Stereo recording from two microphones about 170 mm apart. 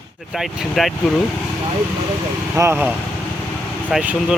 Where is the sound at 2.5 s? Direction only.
15° right (ahead or behind).